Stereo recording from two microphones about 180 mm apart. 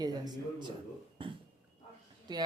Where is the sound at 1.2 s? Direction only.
30° right (ahead or behind).